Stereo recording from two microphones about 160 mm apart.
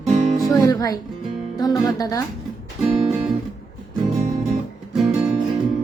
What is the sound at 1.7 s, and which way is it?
Speech, centre (ahead or behind).